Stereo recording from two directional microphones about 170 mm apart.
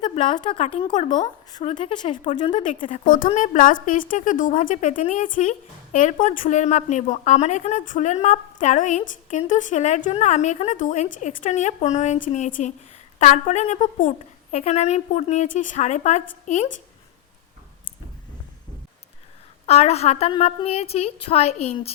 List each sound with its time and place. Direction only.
0.0 s a woman's voice: 30° left (ahead or behind)
3.3 s speech: 50° left (ahead or behind)
19.6 s a woman's voice: 40° left (ahead or behind)